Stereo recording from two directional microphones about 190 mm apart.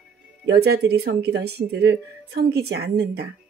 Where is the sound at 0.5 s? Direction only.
60° right (ahead or behind).